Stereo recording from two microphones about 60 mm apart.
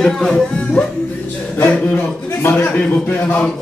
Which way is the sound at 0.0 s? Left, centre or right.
Centre.